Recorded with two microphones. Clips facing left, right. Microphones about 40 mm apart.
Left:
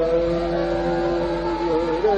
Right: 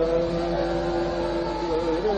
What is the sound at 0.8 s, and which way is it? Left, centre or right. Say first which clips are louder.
Music: left 4 dB; left.